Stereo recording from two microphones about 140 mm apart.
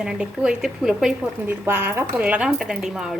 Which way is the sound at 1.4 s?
15° right (ahead or behind).